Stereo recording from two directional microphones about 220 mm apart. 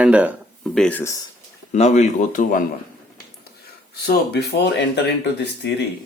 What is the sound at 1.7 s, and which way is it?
Speech, 30° left (ahead or behind).